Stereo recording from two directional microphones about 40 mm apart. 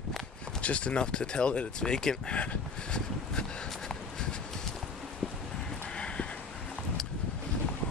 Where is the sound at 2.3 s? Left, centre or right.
Left.